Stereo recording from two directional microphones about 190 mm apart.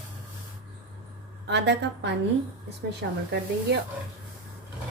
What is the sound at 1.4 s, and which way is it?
A woman's voice, 65° right (ahead or behind).